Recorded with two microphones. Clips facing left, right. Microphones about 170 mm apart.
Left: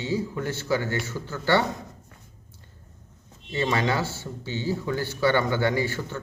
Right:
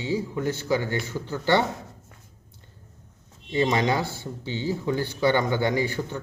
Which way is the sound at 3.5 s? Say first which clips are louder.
Right 2 dB; 15° right (ahead or behind).